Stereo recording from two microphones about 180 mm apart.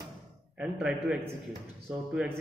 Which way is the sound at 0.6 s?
5° right (ahead or behind).